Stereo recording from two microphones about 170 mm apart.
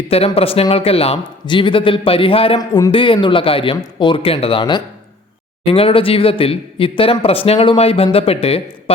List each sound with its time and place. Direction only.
0.1 s speech: 35° left (ahead or behind)
2.6 s speech: 25° left (ahead or behind)